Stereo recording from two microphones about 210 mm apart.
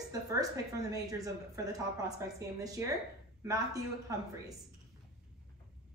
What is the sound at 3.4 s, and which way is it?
Speech, 15° right (ahead or behind).